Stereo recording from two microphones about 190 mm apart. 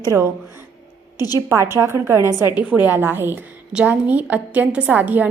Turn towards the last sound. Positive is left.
turn(degrees=-10)  # may be behind; listen again after turning